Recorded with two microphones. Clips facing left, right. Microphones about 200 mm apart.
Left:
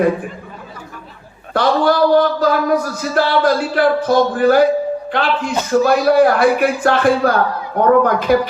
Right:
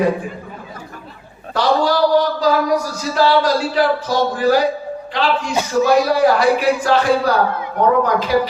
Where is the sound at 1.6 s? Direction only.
55° left (ahead or behind).